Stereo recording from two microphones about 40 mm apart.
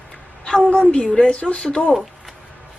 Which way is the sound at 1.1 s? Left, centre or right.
Left.